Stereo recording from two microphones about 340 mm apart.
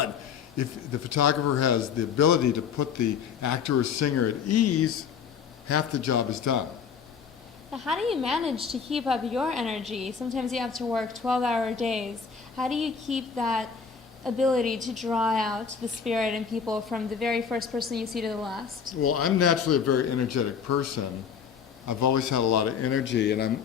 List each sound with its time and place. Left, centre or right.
0.6 s a man's voice: left
7.7 s a woman's voice: centre
18.9 s a man's voice: left